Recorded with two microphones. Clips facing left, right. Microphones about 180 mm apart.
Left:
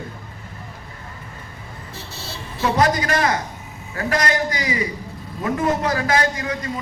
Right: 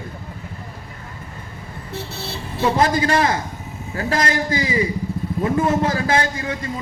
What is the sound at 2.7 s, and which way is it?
A man's voice, 30° right (ahead or behind).